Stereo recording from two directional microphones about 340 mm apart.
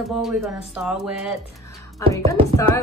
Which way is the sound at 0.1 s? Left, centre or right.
Centre.